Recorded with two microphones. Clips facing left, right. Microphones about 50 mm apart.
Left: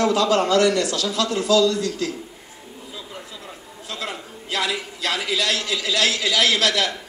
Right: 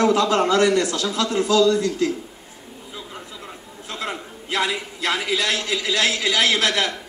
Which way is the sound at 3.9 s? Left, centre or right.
Right.